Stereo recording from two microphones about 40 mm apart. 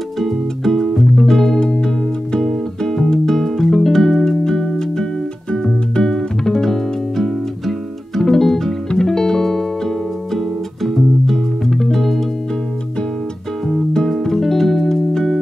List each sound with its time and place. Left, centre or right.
0.2 s music: centre
1.6 s music: centre
13.9 s music: centre